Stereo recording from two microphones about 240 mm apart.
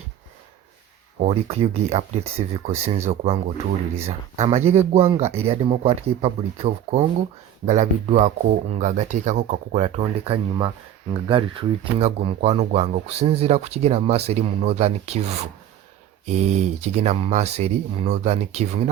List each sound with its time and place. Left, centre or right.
1.2 s speech: right